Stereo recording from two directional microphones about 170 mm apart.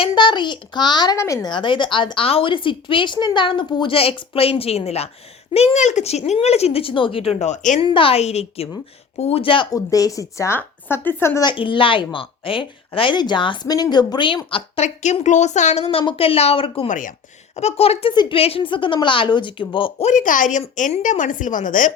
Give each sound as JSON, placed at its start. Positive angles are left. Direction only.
{"t": 0.0, "sound": "a woman's voice", "side_deg": 25}
{"t": 7.9, "sound": "a woman's voice", "side_deg": 30}
{"t": 9.7, "sound": "speech", "side_deg": 20}
{"t": 11.4, "sound": "speech", "side_deg": 30}
{"t": 15.0, "sound": "a woman's voice", "side_deg": 45}
{"t": 20.1, "sound": "a woman's voice", "side_deg": 50}